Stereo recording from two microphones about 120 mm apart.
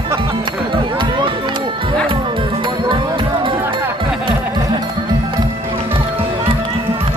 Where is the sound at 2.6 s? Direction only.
40° right (ahead or behind).